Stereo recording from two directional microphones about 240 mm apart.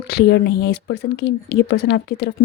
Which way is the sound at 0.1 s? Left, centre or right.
Left.